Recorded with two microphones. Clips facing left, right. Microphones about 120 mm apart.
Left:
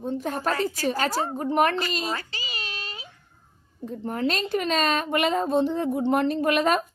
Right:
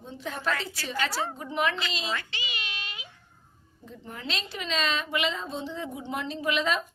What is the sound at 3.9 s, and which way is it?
A woman's voice, 50° left (ahead or behind).